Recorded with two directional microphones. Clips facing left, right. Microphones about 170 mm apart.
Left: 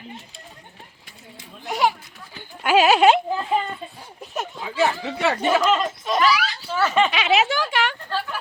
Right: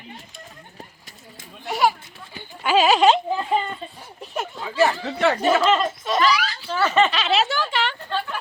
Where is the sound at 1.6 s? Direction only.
Centre (ahead or behind).